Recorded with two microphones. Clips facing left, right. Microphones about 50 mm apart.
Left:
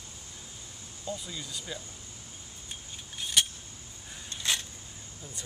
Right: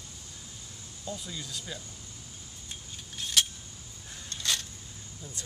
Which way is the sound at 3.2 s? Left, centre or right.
Centre.